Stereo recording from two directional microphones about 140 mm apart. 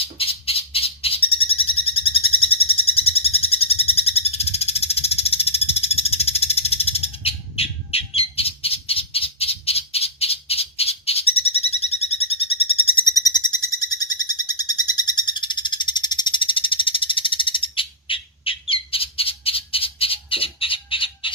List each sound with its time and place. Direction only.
0.0 s owl: 40° left (ahead or behind)
13.1 s bird: 30° left (ahead or behind)
14.3 s frog: 30° left (ahead or behind)